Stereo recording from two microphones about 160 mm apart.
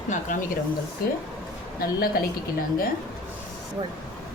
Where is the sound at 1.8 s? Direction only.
70° left (ahead or behind).